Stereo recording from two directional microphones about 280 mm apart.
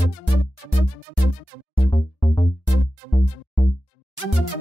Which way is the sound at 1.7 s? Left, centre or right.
Left.